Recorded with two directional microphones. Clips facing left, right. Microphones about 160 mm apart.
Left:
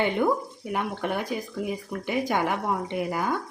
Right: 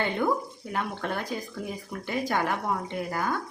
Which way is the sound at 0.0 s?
15° left (ahead or behind).